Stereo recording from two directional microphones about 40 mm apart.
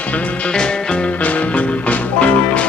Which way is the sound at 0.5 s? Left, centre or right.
Left.